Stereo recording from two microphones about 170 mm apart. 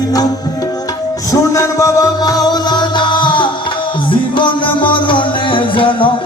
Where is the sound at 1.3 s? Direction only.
20° left (ahead or behind).